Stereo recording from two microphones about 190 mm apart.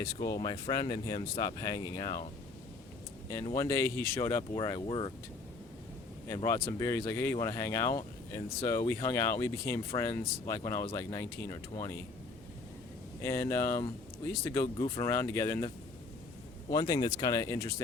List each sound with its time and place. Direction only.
0.3 s speech: 20° left (ahead or behind)
3.5 s speech: 15° left (ahead or behind)
6.2 s speech: 15° left (ahead or behind)
13.2 s speech: 15° left (ahead or behind)